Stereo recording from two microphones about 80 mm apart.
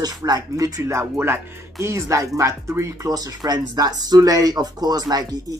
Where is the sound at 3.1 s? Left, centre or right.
Right.